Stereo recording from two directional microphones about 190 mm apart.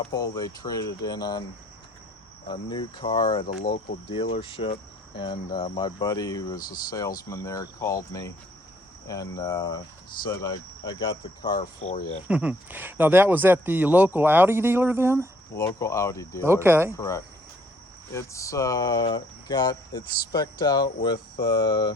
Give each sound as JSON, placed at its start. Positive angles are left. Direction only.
{"t": 0.1, "sound": "speech", "side_deg": 20}
{"t": 2.5, "sound": "speech", "side_deg": 25}
{"t": 12.3, "sound": "speech", "side_deg": -5}
{"t": 15.5, "sound": "speech", "side_deg": 15}
{"t": 16.5, "sound": "speech", "side_deg": -15}
{"t": 16.9, "sound": "speech", "side_deg": 15}